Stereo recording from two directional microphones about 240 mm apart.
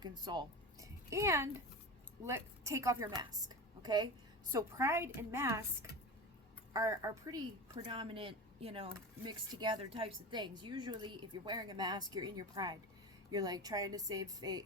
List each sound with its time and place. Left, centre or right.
0.0 s a woman's voice: centre